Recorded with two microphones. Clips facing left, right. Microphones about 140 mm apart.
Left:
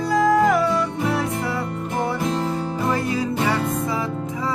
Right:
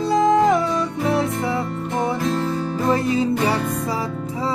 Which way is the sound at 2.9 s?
25° right (ahead or behind).